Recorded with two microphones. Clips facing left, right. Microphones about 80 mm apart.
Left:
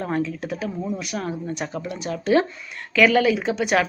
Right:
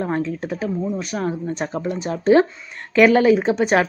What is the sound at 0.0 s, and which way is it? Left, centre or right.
Speech, right.